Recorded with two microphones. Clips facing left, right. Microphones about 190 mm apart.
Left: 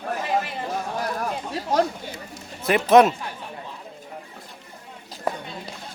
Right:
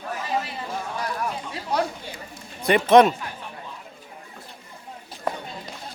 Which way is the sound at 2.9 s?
Centre (ahead or behind).